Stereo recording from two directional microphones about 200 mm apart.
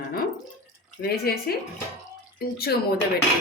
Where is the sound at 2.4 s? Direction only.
50° left (ahead or behind).